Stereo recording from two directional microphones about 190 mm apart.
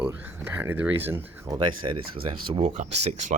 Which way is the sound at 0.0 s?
10° right (ahead or behind).